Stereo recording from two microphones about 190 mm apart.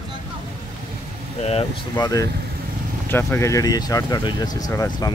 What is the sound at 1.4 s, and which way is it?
Speech, 25° left (ahead or behind).